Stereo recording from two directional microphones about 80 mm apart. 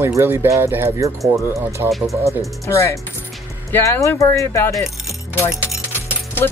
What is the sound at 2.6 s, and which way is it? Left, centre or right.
Speech, left.